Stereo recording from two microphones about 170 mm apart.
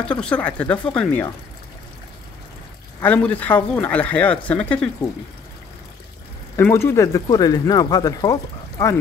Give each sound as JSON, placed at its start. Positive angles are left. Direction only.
{"t": 0.0, "sound": "speech", "side_deg": 5}
{"t": 3.0, "sound": "speech", "side_deg": 10}
{"t": 6.5, "sound": "speech", "side_deg": 15}